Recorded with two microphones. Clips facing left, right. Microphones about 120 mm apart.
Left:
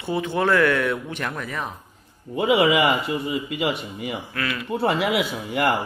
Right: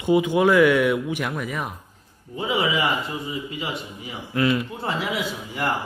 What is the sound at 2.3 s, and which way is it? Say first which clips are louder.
Speech: left 5 dB; 70° left (ahead or behind).